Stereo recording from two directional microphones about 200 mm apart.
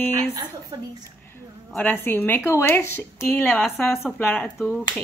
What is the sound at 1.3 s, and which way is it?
Speech, 10° left (ahead or behind).